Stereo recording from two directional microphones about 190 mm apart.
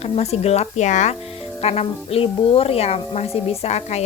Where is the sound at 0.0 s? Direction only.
35° left (ahead or behind).